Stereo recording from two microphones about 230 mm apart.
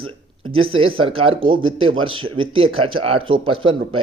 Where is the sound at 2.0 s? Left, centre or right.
Right.